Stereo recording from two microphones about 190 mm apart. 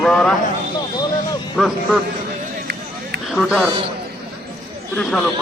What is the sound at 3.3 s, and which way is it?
Speech, centre (ahead or behind).